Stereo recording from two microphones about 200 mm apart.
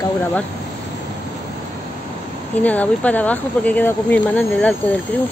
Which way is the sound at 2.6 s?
5° left (ahead or behind).